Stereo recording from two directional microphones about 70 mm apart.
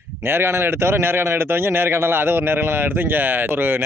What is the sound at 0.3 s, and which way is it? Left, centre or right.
Speech, right.